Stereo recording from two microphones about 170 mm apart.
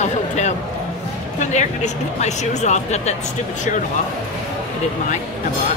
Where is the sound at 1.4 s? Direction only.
45° left (ahead or behind).